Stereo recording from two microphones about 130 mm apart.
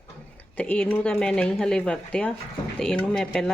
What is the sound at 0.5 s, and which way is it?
Speech, 10° left (ahead or behind).